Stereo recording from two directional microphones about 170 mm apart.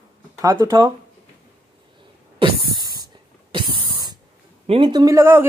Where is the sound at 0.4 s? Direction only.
20° right (ahead or behind).